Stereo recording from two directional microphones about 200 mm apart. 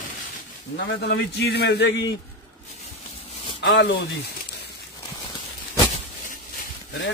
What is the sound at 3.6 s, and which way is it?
Speech, 60° left (ahead or behind).